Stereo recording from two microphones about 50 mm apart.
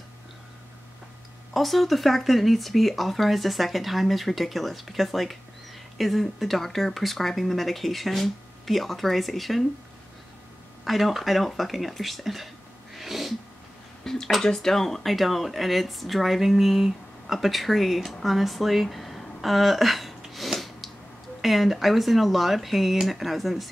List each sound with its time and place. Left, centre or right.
1.5 s speech: centre
10.8 s speech: centre
12.9 s sneeze: centre
14.0 s speech: centre
20.3 s snort: centre
21.4 s speech: centre